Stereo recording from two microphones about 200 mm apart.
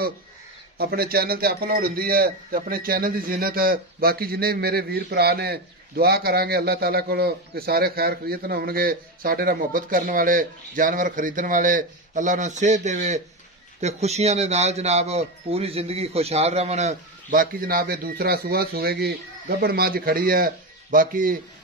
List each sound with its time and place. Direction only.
0.7 s a man's voice: 50° right (ahead or behind)